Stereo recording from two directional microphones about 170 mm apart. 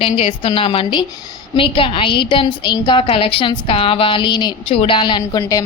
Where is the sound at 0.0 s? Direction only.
30° left (ahead or behind).